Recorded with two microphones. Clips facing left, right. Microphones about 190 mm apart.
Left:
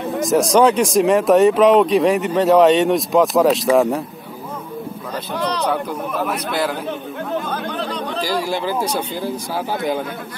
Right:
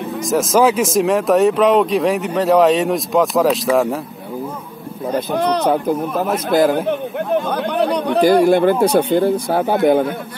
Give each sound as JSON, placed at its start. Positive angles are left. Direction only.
{"t": 0.2, "sound": "speech", "side_deg": 0}
{"t": 5.0, "sound": "a man's voice", "side_deg": -55}